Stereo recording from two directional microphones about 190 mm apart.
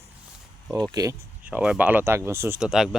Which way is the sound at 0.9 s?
15° right (ahead or behind).